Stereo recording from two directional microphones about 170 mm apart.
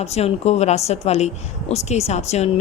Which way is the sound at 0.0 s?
40° left (ahead or behind).